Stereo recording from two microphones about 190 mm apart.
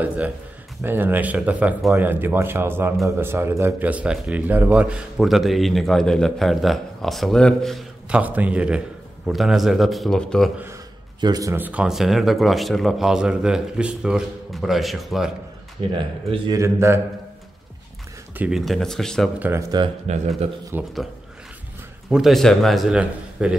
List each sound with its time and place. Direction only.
0.8 s speech: 10° right (ahead or behind)
10.6 s speech: 20° right (ahead or behind); by 15.3 s centre (ahead or behind)
16.0 s speech: 25° right (ahead or behind)
18.4 s speech: centre (ahead or behind)
19.7 s speech: 25° right (ahead or behind)
20.7 s speech: 10° right (ahead or behind)
22.1 s speech: centre (ahead or behind)